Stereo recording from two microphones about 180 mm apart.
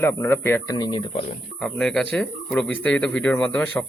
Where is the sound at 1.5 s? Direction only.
5° left (ahead or behind).